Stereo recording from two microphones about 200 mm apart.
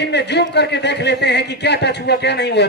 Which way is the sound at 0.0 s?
55° left (ahead or behind).